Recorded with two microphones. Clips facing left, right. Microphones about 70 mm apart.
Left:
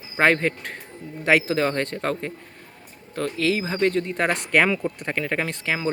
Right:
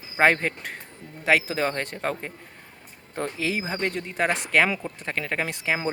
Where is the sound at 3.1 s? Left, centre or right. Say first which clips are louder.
Left 4 dB; right.